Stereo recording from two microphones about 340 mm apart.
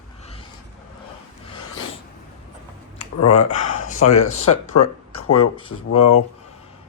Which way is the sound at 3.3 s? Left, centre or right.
Centre.